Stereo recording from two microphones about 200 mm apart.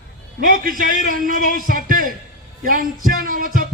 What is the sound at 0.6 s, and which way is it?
A man's voice, 45° right (ahead or behind).